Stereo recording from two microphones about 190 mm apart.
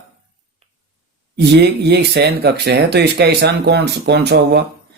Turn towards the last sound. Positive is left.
turn(degrees=-65)  # may be behind; listen again after turning